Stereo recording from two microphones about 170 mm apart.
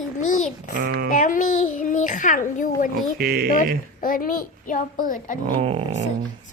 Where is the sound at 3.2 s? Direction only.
65° right (ahead or behind).